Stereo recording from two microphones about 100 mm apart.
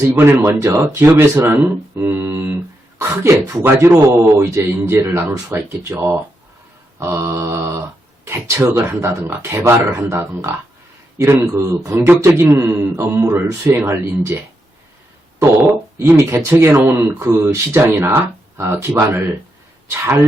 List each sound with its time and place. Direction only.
0.0 s speech: 25° right (ahead or behind)
2.0 s a sound: 25° right (ahead or behind)
3.0 s speech: 25° right (ahead or behind)
15.5 s speech: 20° right (ahead or behind)
19.9 s speech: 25° right (ahead or behind)